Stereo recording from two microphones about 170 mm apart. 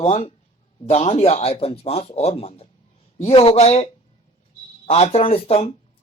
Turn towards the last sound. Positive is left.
turn(degrees=35)  # may be behind; listen again after turning